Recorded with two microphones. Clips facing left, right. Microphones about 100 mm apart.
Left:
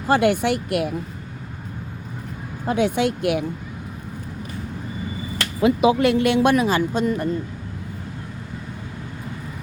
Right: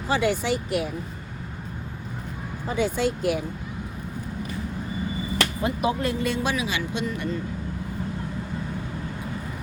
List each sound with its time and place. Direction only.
0.1 s speech: 55° left (ahead or behind)
2.6 s speech: 60° left (ahead or behind)
5.6 s speech: 90° left; by 7.3 s 40° left (ahead or behind)